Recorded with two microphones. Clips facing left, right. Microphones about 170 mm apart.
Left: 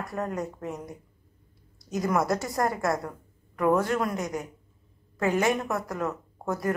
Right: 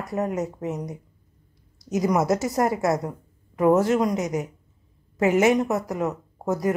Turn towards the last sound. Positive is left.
turn(degrees=-20)  # may be behind; listen again after turning